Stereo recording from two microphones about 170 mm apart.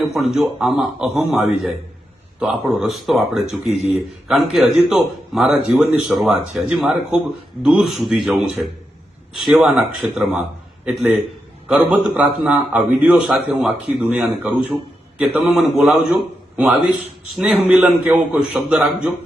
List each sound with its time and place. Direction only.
0.0 s a man's voice: centre (ahead or behind)